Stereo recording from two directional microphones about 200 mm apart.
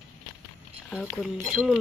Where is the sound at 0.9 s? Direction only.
Centre (ahead or behind).